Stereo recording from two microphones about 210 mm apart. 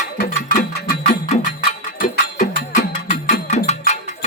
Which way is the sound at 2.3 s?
40° left (ahead or behind).